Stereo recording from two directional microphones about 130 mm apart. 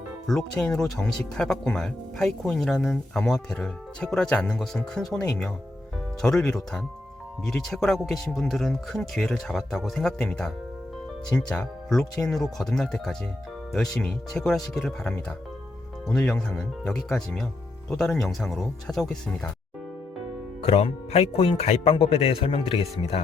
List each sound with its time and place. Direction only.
0.3 s speech: 5° left (ahead or behind)
20.7 s speech: 50° left (ahead or behind)